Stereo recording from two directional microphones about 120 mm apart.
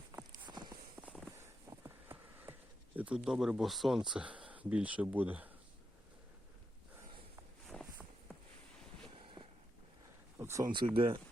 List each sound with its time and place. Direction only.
0.3 s walk: 40° right (ahead or behind)
1.0 s walk: 10° right (ahead or behind)
1.7 s a sound: 20° right (ahead or behind)
7.7 s walk: 5° left (ahead or behind)
10.3 s a sound: 25° right (ahead or behind)
10.9 s speech: 45° right (ahead or behind)